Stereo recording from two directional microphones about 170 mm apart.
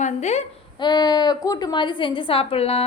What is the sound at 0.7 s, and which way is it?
A woman's voice, 25° left (ahead or behind).